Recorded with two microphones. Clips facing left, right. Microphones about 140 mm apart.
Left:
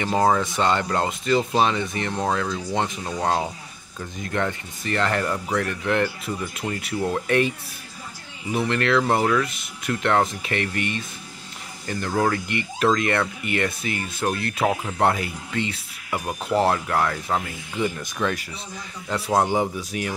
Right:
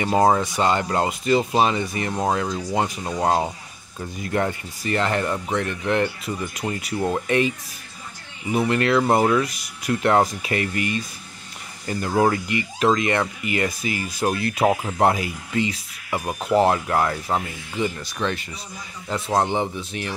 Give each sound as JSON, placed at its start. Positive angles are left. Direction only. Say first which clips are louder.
{"t": 0.0, "sound": "speech", "louder": "right 2 dB", "side_deg": -15}
{"t": 0.6, "sound": "speech", "louder": "right 1 dB", "side_deg": -5}
{"t": 6.6, "sound": "speech", "louder": "right 2 dB", "side_deg": -15}
{"t": 7.2, "sound": "speech", "louder": "even", "side_deg": 0}
{"t": 12.4, "sound": "a man's voice", "louder": "right 1 dB", "side_deg": -5}